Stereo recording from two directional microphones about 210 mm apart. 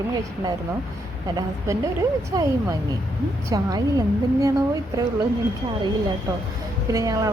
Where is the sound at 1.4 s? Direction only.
15° right (ahead or behind).